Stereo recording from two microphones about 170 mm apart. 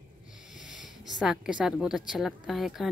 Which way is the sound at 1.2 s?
5° right (ahead or behind).